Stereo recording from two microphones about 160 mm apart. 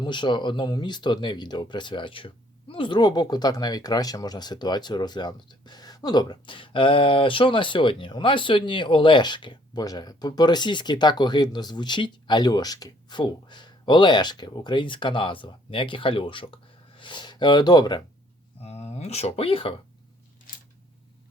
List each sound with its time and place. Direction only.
0.0 s speech: 30° left (ahead or behind)
18.6 s speech: 40° left (ahead or behind)